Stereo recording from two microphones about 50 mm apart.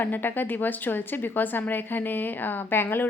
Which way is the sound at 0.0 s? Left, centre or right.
Left.